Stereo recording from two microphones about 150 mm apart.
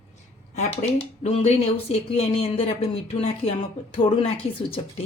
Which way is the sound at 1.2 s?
45° left (ahead or behind).